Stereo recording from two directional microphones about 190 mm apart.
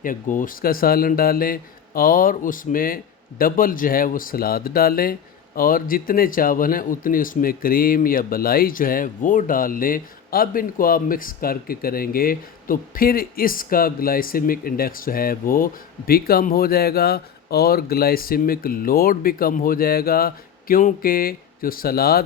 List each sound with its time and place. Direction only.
0.0 s a man's voice: 45° left (ahead or behind)